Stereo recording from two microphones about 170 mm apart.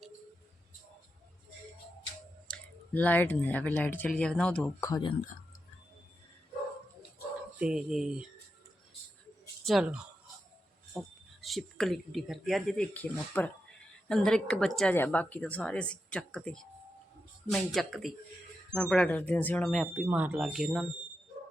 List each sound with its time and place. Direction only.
2.9 s speech: 10° left (ahead or behind)
4.8 s speech: 25° left (ahead or behind)
7.6 s speech: 5° right (ahead or behind)
9.6 s speech: 5° right (ahead or behind)
20.1 s speech: 10° right (ahead or behind)